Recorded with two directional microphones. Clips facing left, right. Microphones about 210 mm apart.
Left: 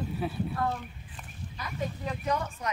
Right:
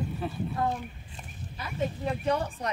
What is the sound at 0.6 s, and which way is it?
Speech, 20° right (ahead or behind).